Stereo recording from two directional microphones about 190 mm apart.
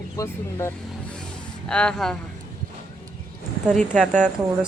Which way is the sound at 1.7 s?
5° left (ahead or behind).